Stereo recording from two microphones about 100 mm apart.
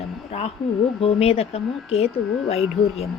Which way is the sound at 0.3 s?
90° left.